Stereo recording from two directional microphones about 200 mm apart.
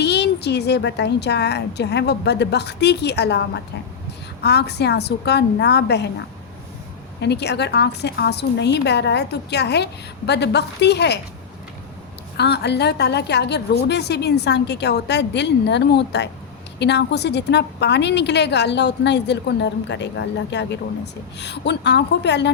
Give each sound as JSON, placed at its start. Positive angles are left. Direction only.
{"t": 0.0, "sound": "a woman's voice", "side_deg": 55}
{"t": 7.2, "sound": "a woman's voice", "side_deg": 55}
{"t": 12.4, "sound": "a woman's voice", "side_deg": 55}